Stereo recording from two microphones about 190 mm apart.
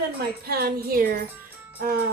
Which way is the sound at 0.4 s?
55° right (ahead or behind).